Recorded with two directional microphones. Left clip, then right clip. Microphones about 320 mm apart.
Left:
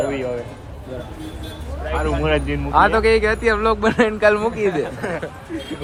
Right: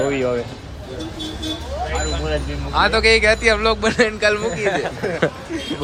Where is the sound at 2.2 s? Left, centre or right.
Centre.